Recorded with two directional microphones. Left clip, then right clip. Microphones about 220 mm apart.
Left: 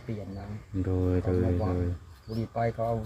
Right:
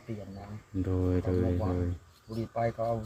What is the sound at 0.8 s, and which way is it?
Speech, 5° right (ahead or behind).